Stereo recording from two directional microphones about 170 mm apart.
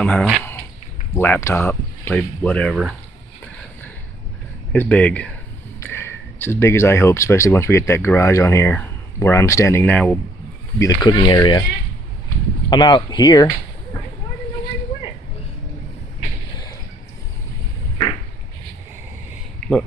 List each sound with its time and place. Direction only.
0.0 s speech: 5° left (ahead or behind)
4.7 s speech: 10° left (ahead or behind)
10.8 s speech: 25° left (ahead or behind)
12.6 s speech: 25° left (ahead or behind)